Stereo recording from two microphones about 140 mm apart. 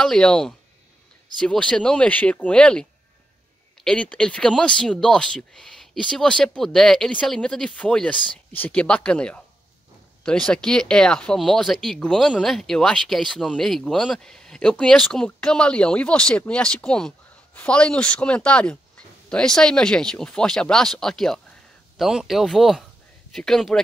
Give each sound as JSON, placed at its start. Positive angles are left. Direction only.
{"t": 0.0, "sound": "speech", "side_deg": 5}